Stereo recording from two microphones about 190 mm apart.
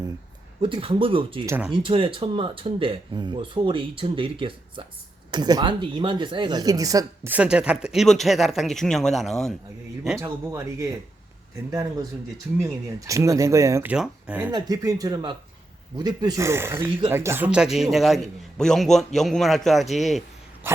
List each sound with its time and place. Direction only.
0.6 s speech: 25° right (ahead or behind)
1.5 s speech: 10° right (ahead or behind)
1.7 s speech: 25° right (ahead or behind)
7.3 s a man's voice: 5° right (ahead or behind)
10.2 s speech: 15° right (ahead or behind)
13.1 s speech: 15° right (ahead or behind)
13.9 s a man's voice: 5° right (ahead or behind)
14.5 s a man's voice: 20° right (ahead or behind); by 20.2 s centre (ahead or behind)
20.7 s speech: 10° right (ahead or behind)